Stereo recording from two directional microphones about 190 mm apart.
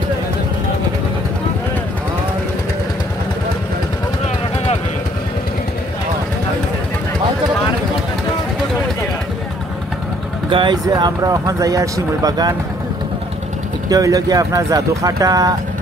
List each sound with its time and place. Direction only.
10.5 s speech: 25° right (ahead or behind)
13.8 s speech: 20° right (ahead or behind)